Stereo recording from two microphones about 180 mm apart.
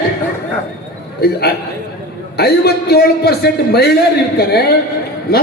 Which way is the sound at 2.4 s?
65° left (ahead or behind).